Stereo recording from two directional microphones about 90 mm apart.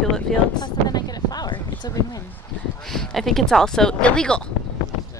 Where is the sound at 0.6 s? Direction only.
45° left (ahead or behind).